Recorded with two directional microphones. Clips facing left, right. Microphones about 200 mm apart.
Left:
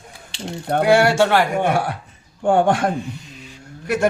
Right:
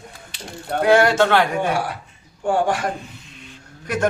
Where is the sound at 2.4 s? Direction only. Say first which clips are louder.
Left 4 dB; 55° left (ahead or behind).